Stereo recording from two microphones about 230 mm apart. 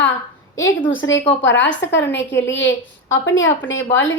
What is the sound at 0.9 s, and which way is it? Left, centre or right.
A woman's voice, left.